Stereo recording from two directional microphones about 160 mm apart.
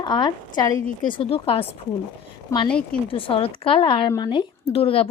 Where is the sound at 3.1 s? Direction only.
35° left (ahead or behind).